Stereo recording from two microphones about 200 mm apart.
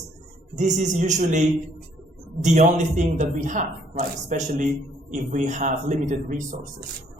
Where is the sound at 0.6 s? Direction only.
35° right (ahead or behind).